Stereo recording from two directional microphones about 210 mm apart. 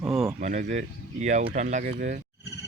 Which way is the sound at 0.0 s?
Centre (ahead or behind).